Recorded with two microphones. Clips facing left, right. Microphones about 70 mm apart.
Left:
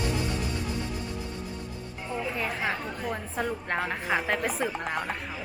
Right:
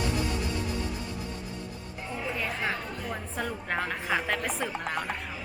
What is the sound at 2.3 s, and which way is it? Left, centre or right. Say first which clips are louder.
A woman's voice: even; centre.